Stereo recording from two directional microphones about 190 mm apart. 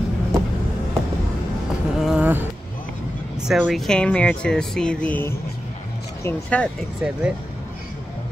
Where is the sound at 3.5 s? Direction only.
Centre (ahead or behind).